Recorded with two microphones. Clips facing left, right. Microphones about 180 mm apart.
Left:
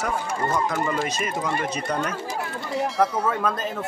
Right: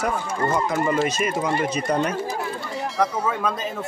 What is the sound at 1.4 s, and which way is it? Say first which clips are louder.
Speech: right 3 dB; 20° right (ahead or behind).